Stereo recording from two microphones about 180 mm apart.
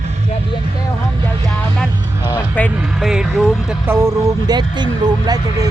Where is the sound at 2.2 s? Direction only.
10° left (ahead or behind).